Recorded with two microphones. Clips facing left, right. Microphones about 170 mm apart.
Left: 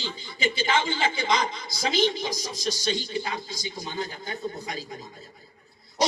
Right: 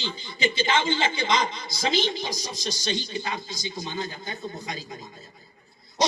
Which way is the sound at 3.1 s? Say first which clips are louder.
Left 1 dB; 30° left (ahead or behind).